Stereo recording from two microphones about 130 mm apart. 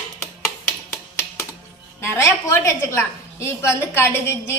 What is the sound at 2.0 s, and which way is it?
A woman's voice, 20° left (ahead or behind).